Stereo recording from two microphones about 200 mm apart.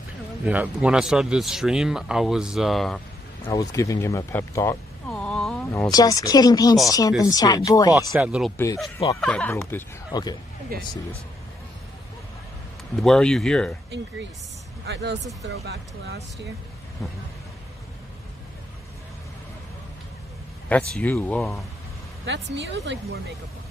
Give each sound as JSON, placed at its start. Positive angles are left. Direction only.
{"t": 0.5, "sound": "speech", "side_deg": -5}
{"t": 3.4, "sound": "speech", "side_deg": 15}
{"t": 5.1, "sound": "a sound", "side_deg": 5}
{"t": 5.7, "sound": "speech", "side_deg": 15}
{"t": 8.1, "sound": "speech", "side_deg": -5}
{"t": 10.7, "sound": "speech", "side_deg": -50}
{"t": 13.0, "sound": "speech", "side_deg": 5}
{"t": 14.9, "sound": "speech", "side_deg": -55}
{"t": 20.6, "sound": "speech", "side_deg": 5}
{"t": 22.2, "sound": "speech", "side_deg": -60}